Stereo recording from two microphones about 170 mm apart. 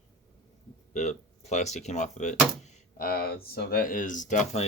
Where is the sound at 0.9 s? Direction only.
45° left (ahead or behind).